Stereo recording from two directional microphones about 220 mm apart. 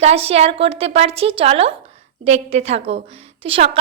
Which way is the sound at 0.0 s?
25° right (ahead or behind).